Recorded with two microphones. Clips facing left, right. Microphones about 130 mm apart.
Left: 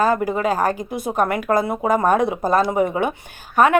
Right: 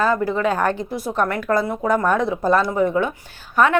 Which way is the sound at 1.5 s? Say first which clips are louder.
Left 1 dB; 15° left (ahead or behind).